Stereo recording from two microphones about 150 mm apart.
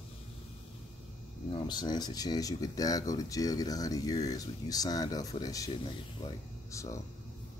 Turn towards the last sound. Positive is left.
turn(degrees=20)  # may be behind; listen again after turning